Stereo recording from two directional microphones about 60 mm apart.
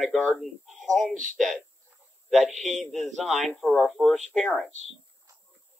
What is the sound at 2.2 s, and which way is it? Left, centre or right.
Speech, centre.